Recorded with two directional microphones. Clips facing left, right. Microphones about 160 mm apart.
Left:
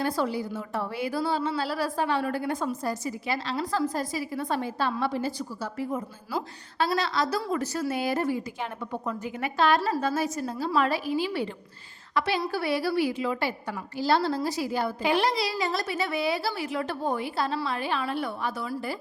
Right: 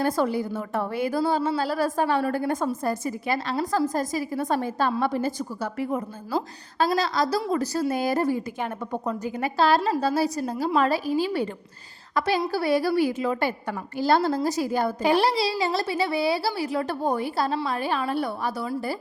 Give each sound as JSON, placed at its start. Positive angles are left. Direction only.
{"t": 0.0, "sound": "speech", "side_deg": -50}
{"t": 6.3, "sound": "a woman's voice", "side_deg": -35}